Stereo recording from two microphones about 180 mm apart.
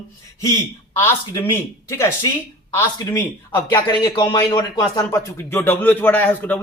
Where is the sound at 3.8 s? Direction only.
25° left (ahead or behind).